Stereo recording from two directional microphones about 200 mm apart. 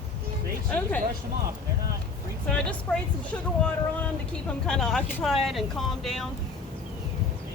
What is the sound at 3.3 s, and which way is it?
Speech, 5° left (ahead or behind).